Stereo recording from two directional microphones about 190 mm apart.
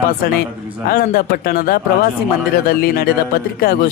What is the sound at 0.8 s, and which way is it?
A man's voice, 50° left (ahead or behind).